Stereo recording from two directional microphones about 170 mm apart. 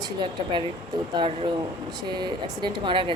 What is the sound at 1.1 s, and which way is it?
Speech, 30° right (ahead or behind).